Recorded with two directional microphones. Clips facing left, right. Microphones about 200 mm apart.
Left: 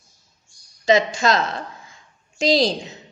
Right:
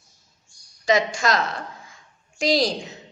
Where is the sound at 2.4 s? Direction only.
25° left (ahead or behind).